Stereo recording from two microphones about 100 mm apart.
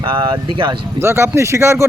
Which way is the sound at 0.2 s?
50° right (ahead or behind).